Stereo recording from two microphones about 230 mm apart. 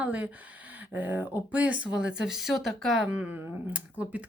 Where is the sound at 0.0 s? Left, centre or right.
Centre.